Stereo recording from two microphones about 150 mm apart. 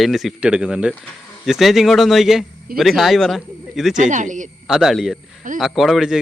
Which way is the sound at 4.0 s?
55° right (ahead or behind).